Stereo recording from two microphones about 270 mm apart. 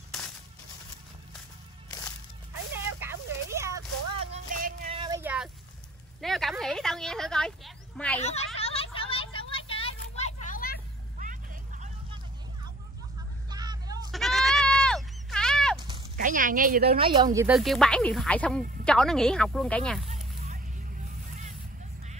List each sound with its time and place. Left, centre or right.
0.1 s coin: centre
3.6 s a sound: centre
4.9 s vehicle: centre
5.2 s vehicle: centre
6.2 s a sound: centre
8.2 s a child's voice: left
8.5 s vehicle: left
11.1 s vehicle: right
13.5 s vehicle: centre
14.1 s sheep: centre
16.2 s speech: right
17.0 s speech: centre
17.6 s speech: centre
20.1 s a sound: right